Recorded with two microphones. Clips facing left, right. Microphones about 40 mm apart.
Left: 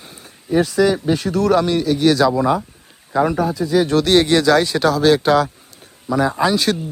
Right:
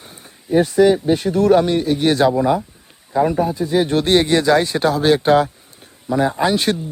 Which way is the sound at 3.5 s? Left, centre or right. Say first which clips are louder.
Left 1 dB; right.